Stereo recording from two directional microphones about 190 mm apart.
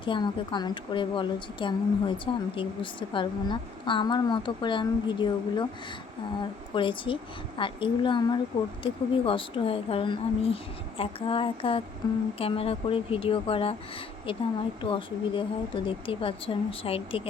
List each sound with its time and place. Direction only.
0.0 s a woman's voice: 25° left (ahead or behind)
6.7 s a woman's voice: 25° left (ahead or behind)
14.8 s a woman's voice: 25° left (ahead or behind)